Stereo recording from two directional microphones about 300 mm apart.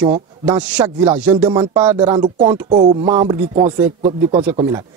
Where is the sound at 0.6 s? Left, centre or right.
Centre.